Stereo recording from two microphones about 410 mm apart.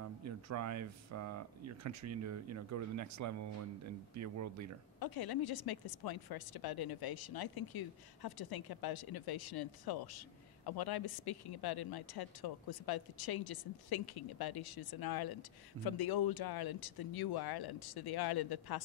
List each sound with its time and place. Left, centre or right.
0.2 s speech: right
5.0 s a woman's voice: left